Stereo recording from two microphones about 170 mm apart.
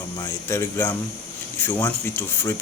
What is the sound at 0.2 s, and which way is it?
Speech, 15° left (ahead or behind).